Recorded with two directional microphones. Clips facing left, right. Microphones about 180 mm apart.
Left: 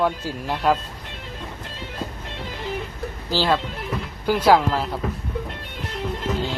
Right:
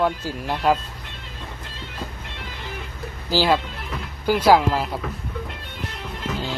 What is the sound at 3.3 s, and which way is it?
Speech, 10° right (ahead or behind).